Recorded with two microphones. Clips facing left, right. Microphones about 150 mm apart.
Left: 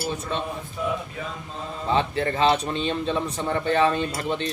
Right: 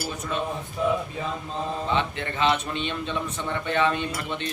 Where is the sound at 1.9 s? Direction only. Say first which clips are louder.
Left 8 dB; 35° left (ahead or behind).